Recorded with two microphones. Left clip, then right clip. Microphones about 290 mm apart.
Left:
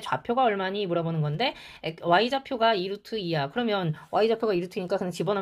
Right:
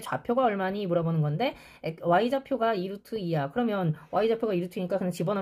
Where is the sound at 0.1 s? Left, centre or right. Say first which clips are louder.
Left 2 dB; centre.